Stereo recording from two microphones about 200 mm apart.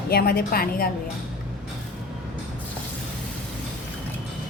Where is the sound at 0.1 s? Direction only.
50° left (ahead or behind).